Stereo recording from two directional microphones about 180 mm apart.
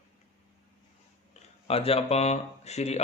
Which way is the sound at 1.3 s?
35° left (ahead or behind).